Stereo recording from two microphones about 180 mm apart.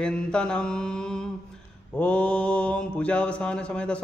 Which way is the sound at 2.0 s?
5° left (ahead or behind).